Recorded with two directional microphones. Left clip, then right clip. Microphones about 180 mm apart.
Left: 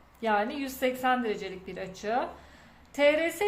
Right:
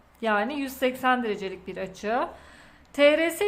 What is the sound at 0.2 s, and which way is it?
A woman's voice, 25° right (ahead or behind).